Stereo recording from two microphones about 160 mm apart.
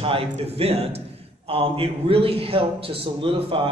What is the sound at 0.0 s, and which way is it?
A man's voice, 35° right (ahead or behind).